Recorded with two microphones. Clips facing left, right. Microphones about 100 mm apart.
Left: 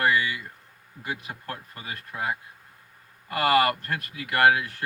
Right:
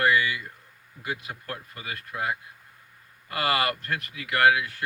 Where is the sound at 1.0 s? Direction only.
30° left (ahead or behind).